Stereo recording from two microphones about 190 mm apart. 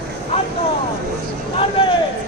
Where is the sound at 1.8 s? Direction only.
30° left (ahead or behind).